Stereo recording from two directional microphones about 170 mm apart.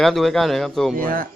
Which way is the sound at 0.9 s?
55° right (ahead or behind).